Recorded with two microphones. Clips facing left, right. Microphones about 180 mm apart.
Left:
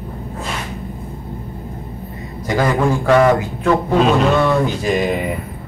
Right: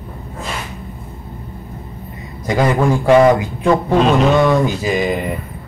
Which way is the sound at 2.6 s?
15° right (ahead or behind).